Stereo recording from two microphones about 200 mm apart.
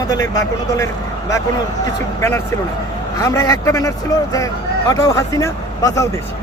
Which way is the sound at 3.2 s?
15° left (ahead or behind).